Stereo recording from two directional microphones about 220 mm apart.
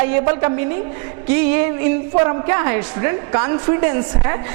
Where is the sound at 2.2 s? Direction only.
20° right (ahead or behind).